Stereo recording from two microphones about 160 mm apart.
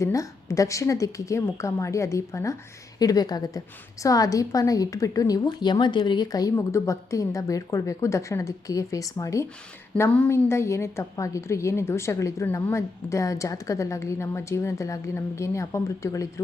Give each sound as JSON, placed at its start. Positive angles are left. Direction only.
{"t": 0.0, "sound": "a woman's voice", "side_deg": 20}
{"t": 9.9, "sound": "a woman's voice", "side_deg": 10}